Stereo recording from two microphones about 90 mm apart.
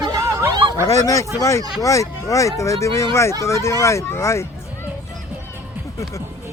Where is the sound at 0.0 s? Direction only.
40° right (ahead or behind).